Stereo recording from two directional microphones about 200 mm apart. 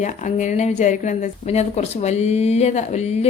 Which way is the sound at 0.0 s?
35° left (ahead or behind).